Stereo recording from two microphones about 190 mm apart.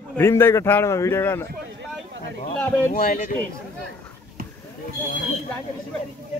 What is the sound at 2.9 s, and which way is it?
Speech, 45° left (ahead or behind).